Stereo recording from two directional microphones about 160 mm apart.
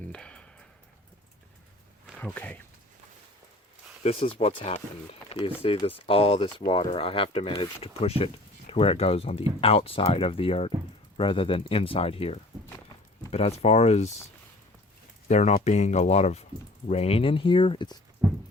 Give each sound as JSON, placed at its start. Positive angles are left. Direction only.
{"t": 0.1, "sound": "a sound", "side_deg": 5}
{"t": 2.1, "sound": "speech", "side_deg": 10}
{"t": 4.0, "sound": "speech", "side_deg": 35}
{"t": 15.3, "sound": "speech", "side_deg": 45}
{"t": 18.2, "sound": "music", "side_deg": -15}